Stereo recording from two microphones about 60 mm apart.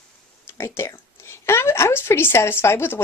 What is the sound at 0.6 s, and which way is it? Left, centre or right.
Speech, left.